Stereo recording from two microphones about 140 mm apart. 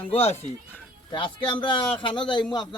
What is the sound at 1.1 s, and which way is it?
A man's voice, 35° left (ahead or behind).